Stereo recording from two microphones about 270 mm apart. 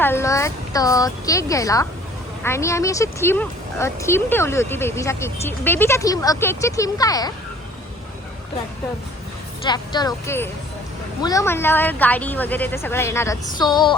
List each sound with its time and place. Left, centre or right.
0.0 s speech: centre
9.6 s speech: centre